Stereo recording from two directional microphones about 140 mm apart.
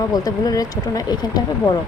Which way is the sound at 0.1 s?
25° left (ahead or behind).